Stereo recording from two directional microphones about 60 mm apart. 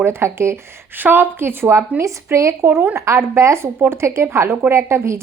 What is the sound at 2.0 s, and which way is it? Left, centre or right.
Speech, right.